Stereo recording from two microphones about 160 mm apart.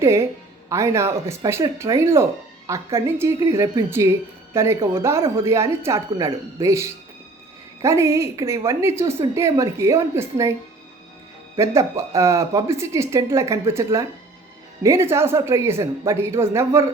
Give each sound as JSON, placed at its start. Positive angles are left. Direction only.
{"t": 0.0, "sound": "speech", "side_deg": -20}
{"t": 11.6, "sound": "speech", "side_deg": -20}
{"t": 14.8, "sound": "speech", "side_deg": -15}